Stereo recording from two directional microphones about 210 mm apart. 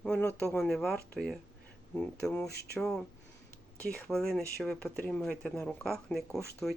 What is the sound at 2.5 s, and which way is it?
Speech, 50° left (ahead or behind).